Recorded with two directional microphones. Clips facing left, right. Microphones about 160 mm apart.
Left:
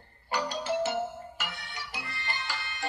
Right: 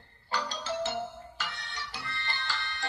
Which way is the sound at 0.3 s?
10° left (ahead or behind).